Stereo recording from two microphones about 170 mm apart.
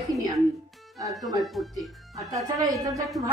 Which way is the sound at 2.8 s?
20° right (ahead or behind).